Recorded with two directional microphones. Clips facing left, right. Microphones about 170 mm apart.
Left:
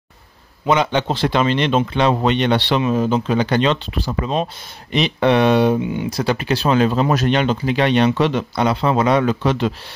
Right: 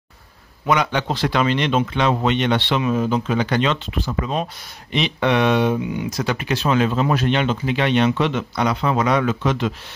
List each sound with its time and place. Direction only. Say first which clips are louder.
0.7 s speech: left 3 dB; 25° left (ahead or behind)